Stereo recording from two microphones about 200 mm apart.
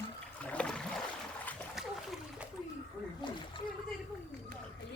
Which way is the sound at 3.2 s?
25° left (ahead or behind).